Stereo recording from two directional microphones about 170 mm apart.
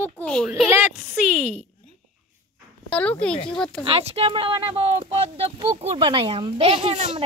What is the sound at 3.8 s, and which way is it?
Speech, 35° right (ahead or behind).